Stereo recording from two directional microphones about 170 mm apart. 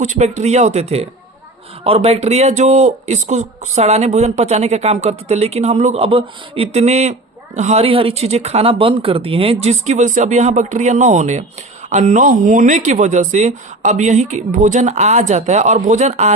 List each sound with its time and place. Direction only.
0.0 s speech: 45° right (ahead or behind)